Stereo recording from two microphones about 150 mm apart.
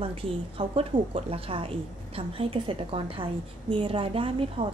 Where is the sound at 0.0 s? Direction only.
40° right (ahead or behind).